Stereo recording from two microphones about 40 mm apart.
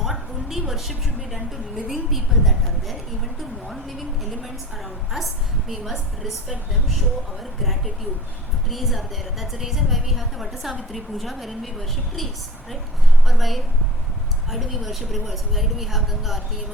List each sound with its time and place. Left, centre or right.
0.0 s a woman's voice: centre
7.6 s a woman's voice: centre